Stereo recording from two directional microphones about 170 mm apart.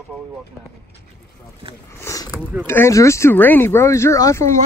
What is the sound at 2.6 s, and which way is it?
Speech, 15° left (ahead or behind).